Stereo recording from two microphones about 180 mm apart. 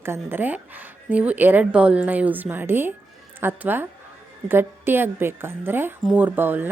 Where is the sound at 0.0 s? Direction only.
15° right (ahead or behind).